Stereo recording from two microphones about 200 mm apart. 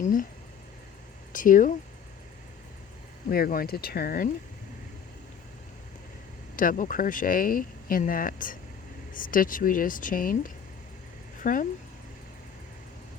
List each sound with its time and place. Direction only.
0.0 s a sound: 40° left (ahead or behind)
1.3 s speech: 40° left (ahead or behind)
3.2 s speech: 45° left (ahead or behind)
6.6 s speech: 40° left (ahead or behind)